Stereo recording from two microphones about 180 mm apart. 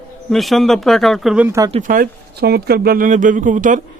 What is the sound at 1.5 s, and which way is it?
Speech, 20° right (ahead or behind).